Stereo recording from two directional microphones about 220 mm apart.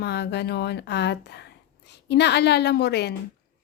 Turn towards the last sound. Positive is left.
turn(degrees=50)  # may be behind; listen again after turning